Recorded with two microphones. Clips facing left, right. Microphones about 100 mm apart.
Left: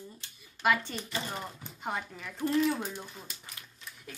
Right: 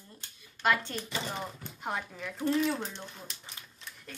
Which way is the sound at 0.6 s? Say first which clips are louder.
Even; 5° left (ahead or behind).